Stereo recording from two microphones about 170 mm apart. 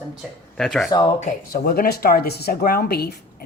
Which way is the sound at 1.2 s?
55° left (ahead or behind).